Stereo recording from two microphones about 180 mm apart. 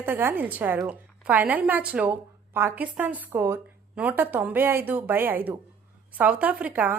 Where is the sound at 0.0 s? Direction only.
10° right (ahead or behind).